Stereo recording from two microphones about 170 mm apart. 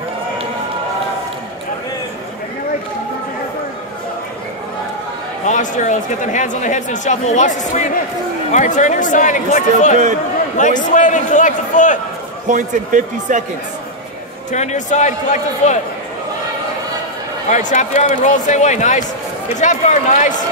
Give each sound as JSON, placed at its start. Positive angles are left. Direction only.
{"t": 5.4, "sound": "speech", "side_deg": 45}
{"t": 12.4, "sound": "a man's voice", "side_deg": -50}
{"t": 14.5, "sound": "speech", "side_deg": 45}
{"t": 17.5, "sound": "speech", "side_deg": 45}